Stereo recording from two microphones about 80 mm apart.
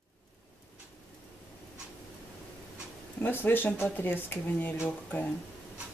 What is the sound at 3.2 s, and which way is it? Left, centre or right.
Speech, left.